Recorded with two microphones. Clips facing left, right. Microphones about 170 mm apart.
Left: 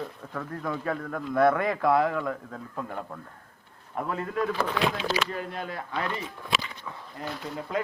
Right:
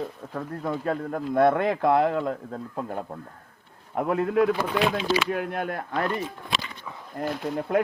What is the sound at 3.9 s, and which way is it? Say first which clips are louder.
A man's voice: right 7 dB; 55° right (ahead or behind).